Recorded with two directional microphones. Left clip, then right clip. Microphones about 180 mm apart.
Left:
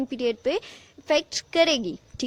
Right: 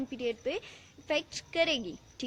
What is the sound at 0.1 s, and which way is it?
Speech, 50° left (ahead or behind).